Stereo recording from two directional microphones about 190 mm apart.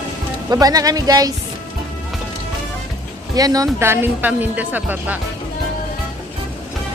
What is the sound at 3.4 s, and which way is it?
Speech, 20° right (ahead or behind).